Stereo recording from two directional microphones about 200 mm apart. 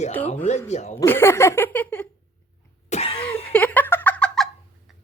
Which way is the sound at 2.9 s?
30° left (ahead or behind).